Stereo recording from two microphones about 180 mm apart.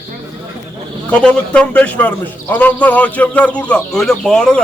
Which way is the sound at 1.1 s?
5° left (ahead or behind).